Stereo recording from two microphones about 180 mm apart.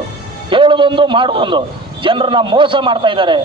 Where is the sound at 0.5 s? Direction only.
30° right (ahead or behind).